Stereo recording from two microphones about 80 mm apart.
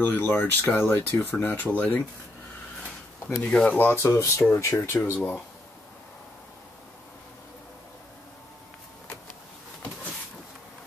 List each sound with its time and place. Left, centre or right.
0.0 s speech: left
3.3 s speech: centre
3.7 s speech: left
4.0 s speech: left